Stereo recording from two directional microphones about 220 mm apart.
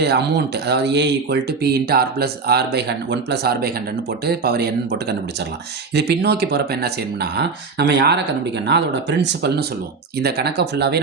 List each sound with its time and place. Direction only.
0.0 s speech: 50° right (ahead or behind)